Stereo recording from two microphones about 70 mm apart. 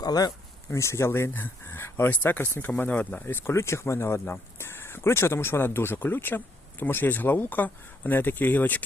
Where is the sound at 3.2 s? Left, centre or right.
Left.